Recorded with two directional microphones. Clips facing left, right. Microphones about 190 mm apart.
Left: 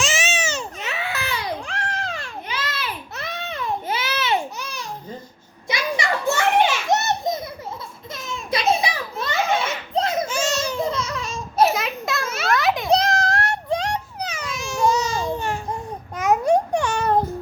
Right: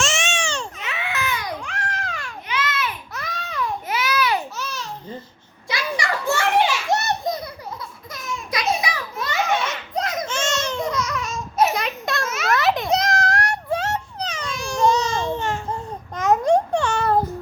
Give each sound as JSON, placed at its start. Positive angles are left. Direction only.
{"t": 0.0, "sound": "baby cry", "side_deg": 0}
{"t": 0.8, "sound": "baby cry", "side_deg": 35}
{"t": 4.5, "sound": "babbling", "side_deg": 15}
{"t": 5.6, "sound": "children playing", "side_deg": 20}
{"t": 8.1, "sound": "a sound", "side_deg": 25}
{"t": 11.7, "sound": "a sound", "side_deg": 0}
{"t": 12.5, "sound": "children playing", "side_deg": 0}
{"t": 12.9, "sound": "a sound", "side_deg": 30}
{"t": 16.1, "sound": "babbling", "side_deg": 10}